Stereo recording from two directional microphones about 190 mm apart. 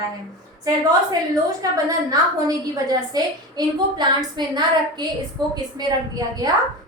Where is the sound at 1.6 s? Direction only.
20° right (ahead or behind).